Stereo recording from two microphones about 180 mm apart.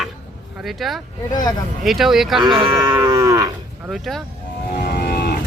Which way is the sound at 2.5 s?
25° right (ahead or behind).